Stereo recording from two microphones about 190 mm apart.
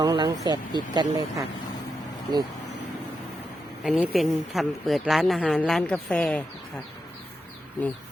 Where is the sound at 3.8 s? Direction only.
5° right (ahead or behind).